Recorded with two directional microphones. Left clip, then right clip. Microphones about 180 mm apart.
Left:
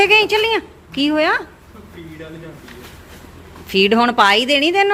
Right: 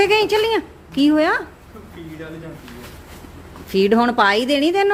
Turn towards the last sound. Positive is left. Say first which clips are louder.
# left 3 dB
turn(degrees=-10)  # may be behind; listen again after turning